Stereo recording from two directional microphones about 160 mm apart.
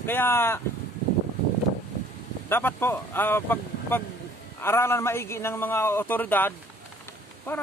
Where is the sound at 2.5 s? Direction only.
15° left (ahead or behind).